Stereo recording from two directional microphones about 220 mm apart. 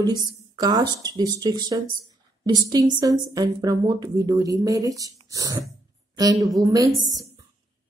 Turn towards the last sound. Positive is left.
turn(degrees=-15)  # may be behind; listen again after turning